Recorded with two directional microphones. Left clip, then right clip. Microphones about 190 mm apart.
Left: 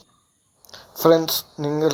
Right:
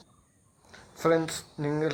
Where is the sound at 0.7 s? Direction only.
20° left (ahead or behind).